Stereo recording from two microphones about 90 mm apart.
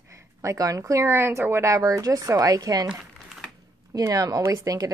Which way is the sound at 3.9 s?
45° right (ahead or behind).